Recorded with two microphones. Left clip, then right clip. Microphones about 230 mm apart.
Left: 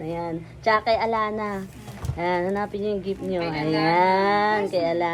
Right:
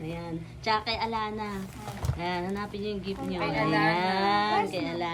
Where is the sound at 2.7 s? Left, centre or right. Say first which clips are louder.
Left 7 dB; centre.